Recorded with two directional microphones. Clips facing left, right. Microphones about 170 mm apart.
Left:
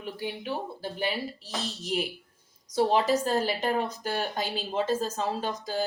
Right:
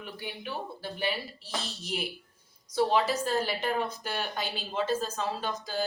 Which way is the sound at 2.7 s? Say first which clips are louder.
Left 2 dB; 40° left (ahead or behind).